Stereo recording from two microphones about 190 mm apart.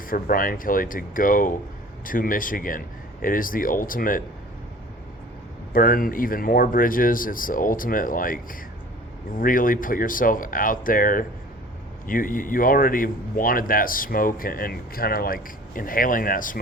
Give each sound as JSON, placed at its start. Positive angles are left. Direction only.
{"t": 0.1, "sound": "speech", "side_deg": 45}
{"t": 5.7, "sound": "speech", "side_deg": 50}
{"t": 9.4, "sound": "speech", "side_deg": 45}